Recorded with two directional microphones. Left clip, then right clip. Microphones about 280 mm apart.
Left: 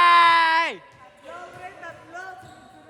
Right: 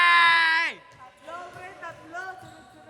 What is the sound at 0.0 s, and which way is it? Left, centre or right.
Groan, centre.